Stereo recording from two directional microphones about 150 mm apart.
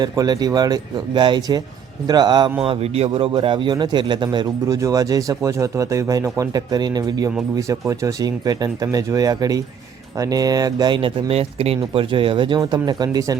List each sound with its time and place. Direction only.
0.0 s speech: 25° right (ahead or behind)
2.6 s speech: 40° right (ahead or behind); by 13.3 s 25° right (ahead or behind)